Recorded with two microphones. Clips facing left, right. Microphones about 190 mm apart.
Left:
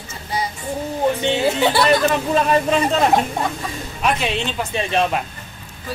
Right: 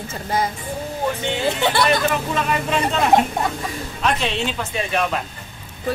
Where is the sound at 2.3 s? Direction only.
35° left (ahead or behind).